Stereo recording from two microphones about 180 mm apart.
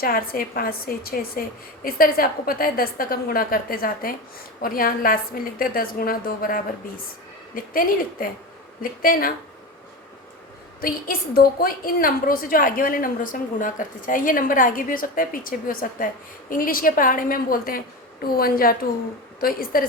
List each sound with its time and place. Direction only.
0.0 s a woman's voice: 55° left (ahead or behind)
10.8 s a woman's voice: 55° left (ahead or behind)